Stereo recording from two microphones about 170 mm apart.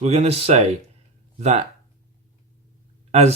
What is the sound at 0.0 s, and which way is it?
Speech, 40° right (ahead or behind).